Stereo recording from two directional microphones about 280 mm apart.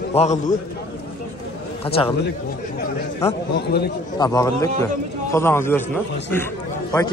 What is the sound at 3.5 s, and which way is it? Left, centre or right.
Speech, left.